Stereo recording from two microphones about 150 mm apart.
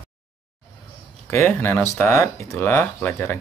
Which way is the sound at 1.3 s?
15° left (ahead or behind).